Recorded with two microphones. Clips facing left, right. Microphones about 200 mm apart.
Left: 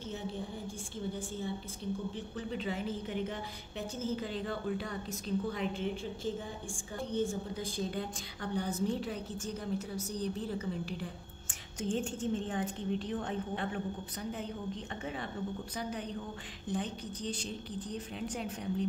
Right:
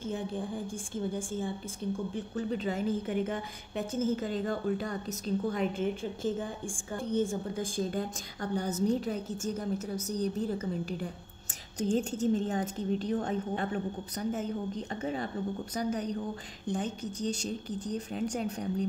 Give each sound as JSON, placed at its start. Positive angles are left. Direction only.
{"t": 0.0, "sound": "a woman's voice", "side_deg": -50}